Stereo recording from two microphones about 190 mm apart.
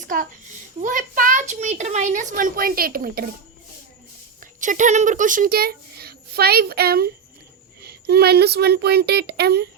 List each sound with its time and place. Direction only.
0.1 s a child's voice: 45° right (ahead or behind)
4.4 s a child's voice: 40° right (ahead or behind); by 9.6 s 60° right (ahead or behind)